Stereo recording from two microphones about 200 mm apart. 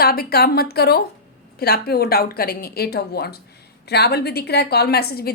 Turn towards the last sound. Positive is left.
turn(degrees=50)  # may be behind; listen again after turning